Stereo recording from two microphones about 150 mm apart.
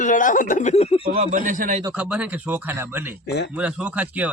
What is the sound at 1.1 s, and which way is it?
Speech, 55° right (ahead or behind).